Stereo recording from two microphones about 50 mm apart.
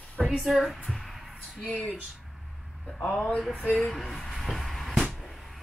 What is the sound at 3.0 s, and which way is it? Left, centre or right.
Speech, left.